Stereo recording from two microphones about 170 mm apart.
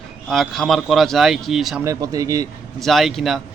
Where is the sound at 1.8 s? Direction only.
20° right (ahead or behind).